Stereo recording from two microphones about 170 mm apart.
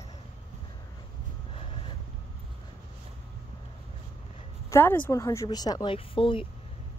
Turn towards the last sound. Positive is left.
turn(degrees=30)  # may be behind; listen again after turning